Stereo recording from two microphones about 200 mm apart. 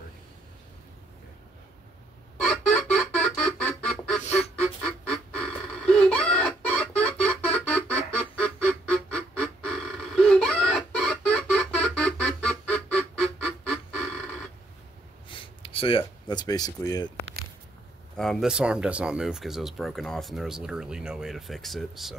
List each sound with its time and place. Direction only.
2.4 s a sound: 5° left (ahead or behind)
4.2 s duck: 35° left (ahead or behind)
4.6 s duck: 5° left (ahead or behind)
5.9 s music: 5° left (ahead or behind)
15.2 s a sound: 25° left (ahead or behind)
18.1 s speech: centre (ahead or behind)